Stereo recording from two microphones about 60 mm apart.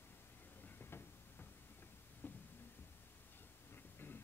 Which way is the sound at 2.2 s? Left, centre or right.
Left.